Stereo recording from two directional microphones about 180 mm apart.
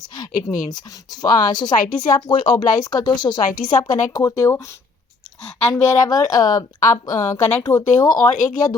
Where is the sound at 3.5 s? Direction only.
45° left (ahead or behind).